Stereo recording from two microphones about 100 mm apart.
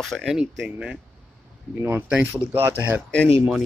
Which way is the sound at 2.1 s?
15° right (ahead or behind).